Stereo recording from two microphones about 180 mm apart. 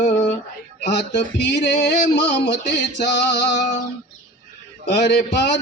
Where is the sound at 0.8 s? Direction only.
70° left (ahead or behind).